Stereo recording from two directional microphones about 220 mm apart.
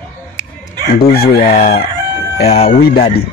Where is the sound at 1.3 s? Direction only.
30° left (ahead or behind).